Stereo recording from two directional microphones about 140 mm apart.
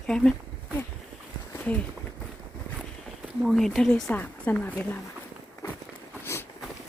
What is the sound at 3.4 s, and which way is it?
Speech, centre (ahead or behind).